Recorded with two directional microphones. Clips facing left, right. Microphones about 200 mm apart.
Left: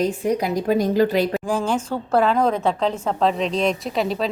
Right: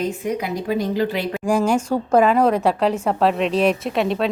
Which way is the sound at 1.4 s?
10° right (ahead or behind).